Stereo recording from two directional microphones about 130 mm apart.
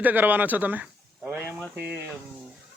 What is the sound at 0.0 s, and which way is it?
A man's voice, 15° right (ahead or behind).